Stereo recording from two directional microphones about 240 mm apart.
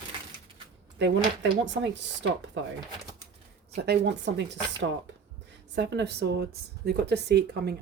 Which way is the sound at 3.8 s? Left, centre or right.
Right.